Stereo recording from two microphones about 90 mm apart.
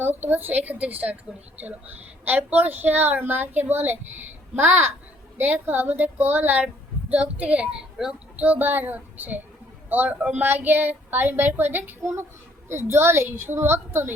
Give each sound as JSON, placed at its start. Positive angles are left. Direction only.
{"t": 0.0, "sound": "a child's voice", "side_deg": -20}
{"t": 8.4, "sound": "a child's voice", "side_deg": -20}